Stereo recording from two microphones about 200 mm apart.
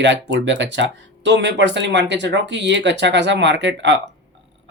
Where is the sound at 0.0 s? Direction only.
60° right (ahead or behind).